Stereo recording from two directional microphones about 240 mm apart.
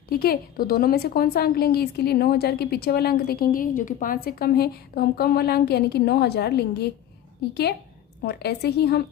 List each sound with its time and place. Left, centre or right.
0.1 s a woman's voice: left